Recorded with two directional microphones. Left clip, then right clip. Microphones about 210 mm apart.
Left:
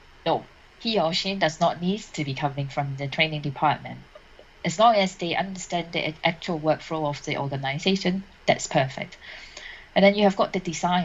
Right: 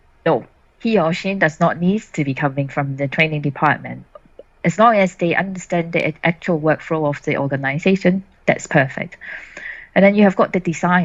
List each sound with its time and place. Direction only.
0.8 s speech: 45° right (ahead or behind)